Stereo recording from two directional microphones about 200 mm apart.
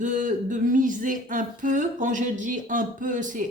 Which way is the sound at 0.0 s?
40° right (ahead or behind).